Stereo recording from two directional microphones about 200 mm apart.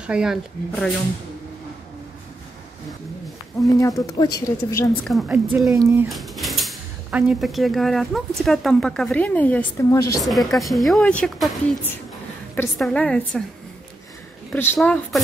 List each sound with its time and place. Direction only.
0.0 s speech: 5° right (ahead or behind)
4.0 s speech: 20° left (ahead or behind)
5.0 s speech: centre (ahead or behind)
5.8 s speech: 15° right (ahead or behind)
6.0 s speech: centre (ahead or behind); by 10.2 s 15° left (ahead or behind)
10.2 s speech: centre (ahead or behind)
14.5 s speech: 10° left (ahead or behind)